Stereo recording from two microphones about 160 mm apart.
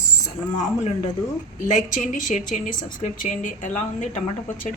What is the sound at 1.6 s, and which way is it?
A woman's voice, 50° left (ahead or behind).